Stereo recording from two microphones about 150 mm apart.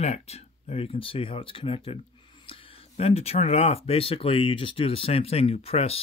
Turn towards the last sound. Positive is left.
turn(degrees=40)  # may be behind; listen again after turning